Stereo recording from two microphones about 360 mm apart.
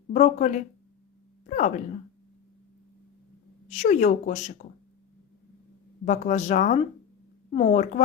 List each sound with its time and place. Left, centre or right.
0.1 s speech: left
3.7 s speech: centre
6.1 s speech: centre